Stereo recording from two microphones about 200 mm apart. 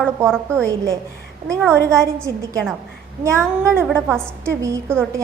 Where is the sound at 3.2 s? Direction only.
15° right (ahead or behind).